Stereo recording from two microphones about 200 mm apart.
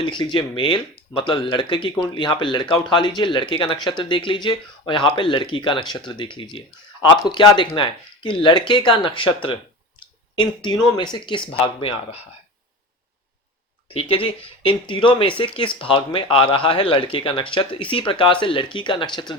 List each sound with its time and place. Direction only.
0.0 s speech: 25° left (ahead or behind)
13.9 s speech: 25° left (ahead or behind)